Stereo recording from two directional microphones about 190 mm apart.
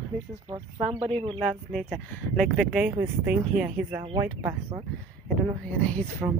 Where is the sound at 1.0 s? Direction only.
30° right (ahead or behind).